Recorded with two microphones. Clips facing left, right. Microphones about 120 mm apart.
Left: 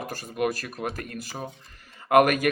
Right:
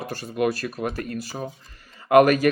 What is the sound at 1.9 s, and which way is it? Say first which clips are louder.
Speech: right 3 dB; 50° left (ahead or behind).